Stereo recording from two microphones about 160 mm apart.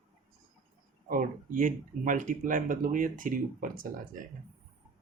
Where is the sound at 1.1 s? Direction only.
55° right (ahead or behind).